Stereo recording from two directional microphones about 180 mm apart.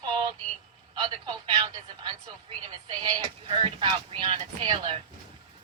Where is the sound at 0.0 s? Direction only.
25° right (ahead or behind).